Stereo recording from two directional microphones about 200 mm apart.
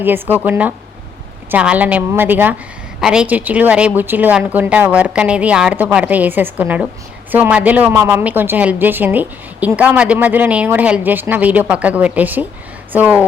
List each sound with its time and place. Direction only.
0.0 s a woman's voice: 10° right (ahead or behind)